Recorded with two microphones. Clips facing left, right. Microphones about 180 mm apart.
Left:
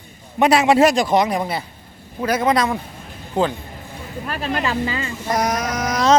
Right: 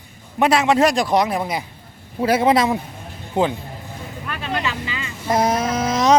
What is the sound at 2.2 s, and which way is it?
Speech, 25° right (ahead or behind).